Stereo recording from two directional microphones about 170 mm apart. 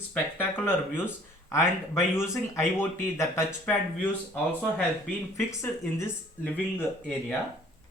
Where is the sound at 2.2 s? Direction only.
15° left (ahead or behind).